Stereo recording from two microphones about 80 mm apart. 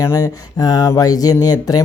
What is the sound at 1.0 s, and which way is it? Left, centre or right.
Speech, left.